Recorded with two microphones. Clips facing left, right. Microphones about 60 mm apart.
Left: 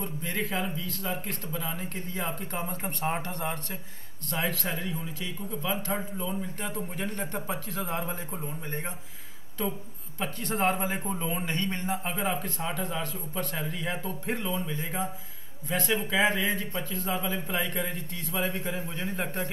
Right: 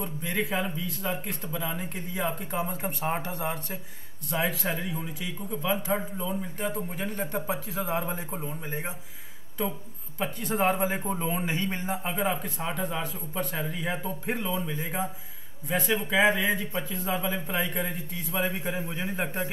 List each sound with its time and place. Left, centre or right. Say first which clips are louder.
0.0 s speech: right 2 dB; centre
11.1 s speech: right 2 dB; centre
17.1 s speech: right 2 dB; centre
17.5 s speech: right 1 dB; centre